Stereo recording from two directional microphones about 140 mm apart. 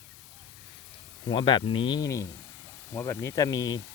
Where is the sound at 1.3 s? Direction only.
35° left (ahead or behind).